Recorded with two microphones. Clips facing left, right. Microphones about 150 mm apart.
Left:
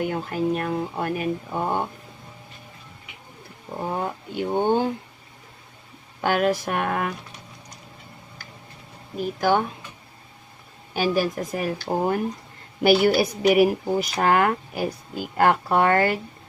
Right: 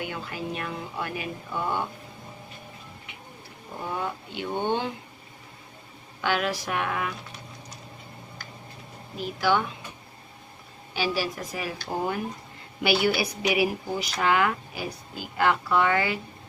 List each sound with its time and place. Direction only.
0.0 s speech: 45° left (ahead or behind)
3.8 s speech: 40° left (ahead or behind)
6.2 s speech: 45° left (ahead or behind)
9.1 s speech: 45° left (ahead or behind)
10.9 s speech: 50° left (ahead or behind)